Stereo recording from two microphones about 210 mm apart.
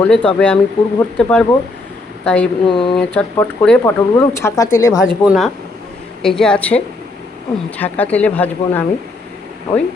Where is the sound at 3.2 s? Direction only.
5° left (ahead or behind).